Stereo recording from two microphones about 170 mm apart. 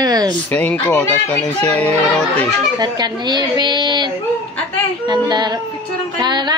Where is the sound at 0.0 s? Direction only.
25° right (ahead or behind).